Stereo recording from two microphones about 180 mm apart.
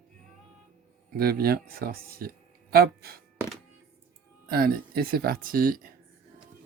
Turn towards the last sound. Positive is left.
turn(degrees=-55)  # may be behind; listen again after turning